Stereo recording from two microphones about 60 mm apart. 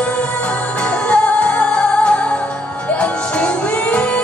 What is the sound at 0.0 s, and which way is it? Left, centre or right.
Music, left.